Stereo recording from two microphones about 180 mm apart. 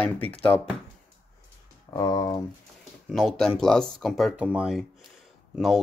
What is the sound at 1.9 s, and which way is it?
Speech, 20° left (ahead or behind).